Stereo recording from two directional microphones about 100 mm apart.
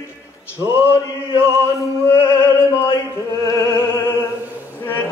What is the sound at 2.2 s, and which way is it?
Opera, 25° left (ahead or behind).